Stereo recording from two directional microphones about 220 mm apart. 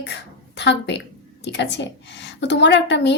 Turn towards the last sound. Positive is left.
turn(degrees=55)  # may be behind; listen again after turning